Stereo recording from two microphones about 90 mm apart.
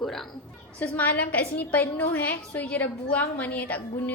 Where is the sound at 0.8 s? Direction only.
15° left (ahead or behind).